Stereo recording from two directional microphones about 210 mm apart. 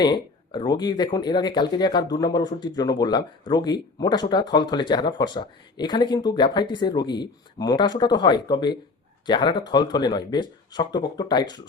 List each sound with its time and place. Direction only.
0.0 s speech: 20° left (ahead or behind)